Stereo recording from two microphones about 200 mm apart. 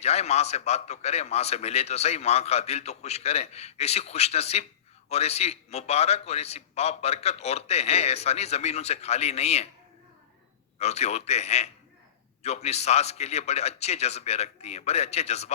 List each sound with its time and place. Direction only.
0.0 s a man's voice: 30° left (ahead or behind)
10.8 s a man's voice: 35° left (ahead or behind)